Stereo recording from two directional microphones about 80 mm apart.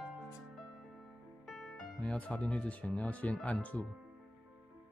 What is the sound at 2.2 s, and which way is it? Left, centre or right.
Speech, centre.